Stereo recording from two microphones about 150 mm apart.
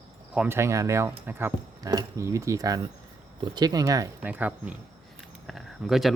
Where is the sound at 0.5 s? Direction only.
20° right (ahead or behind).